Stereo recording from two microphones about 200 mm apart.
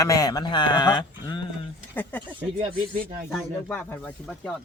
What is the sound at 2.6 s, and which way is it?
Speech, 40° right (ahead or behind).